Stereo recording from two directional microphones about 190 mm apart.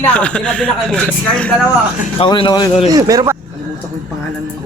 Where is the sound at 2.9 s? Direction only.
20° right (ahead or behind).